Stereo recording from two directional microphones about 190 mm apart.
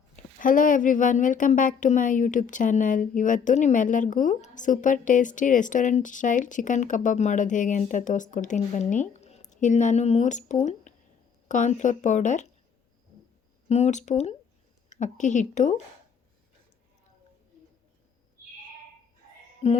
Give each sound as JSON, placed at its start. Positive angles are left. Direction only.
{"t": 0.3, "sound": "a woman's voice", "side_deg": 45}
{"t": 13.7, "sound": "a woman's voice", "side_deg": 35}
{"t": 19.6, "sound": "music", "side_deg": 35}